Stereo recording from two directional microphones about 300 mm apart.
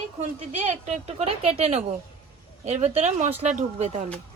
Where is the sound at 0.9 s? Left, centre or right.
Centre.